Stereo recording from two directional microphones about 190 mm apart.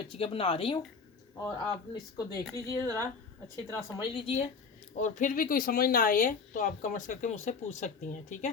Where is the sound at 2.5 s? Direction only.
15° left (ahead or behind).